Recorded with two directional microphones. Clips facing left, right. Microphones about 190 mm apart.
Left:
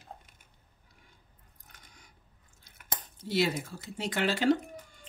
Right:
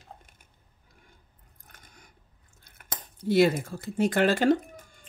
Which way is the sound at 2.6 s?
50° right (ahead or behind).